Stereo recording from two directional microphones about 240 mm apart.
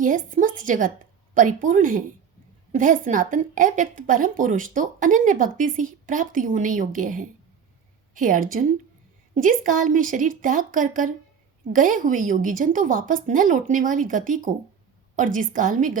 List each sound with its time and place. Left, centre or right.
0.0 s a woman's voice: right